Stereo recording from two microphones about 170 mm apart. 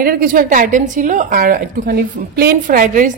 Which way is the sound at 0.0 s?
60° right (ahead or behind).